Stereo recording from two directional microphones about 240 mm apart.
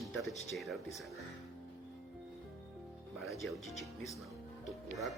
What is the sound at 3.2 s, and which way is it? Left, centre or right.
Speech, centre.